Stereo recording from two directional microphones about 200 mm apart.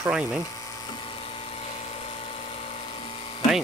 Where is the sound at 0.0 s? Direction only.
5° right (ahead or behind).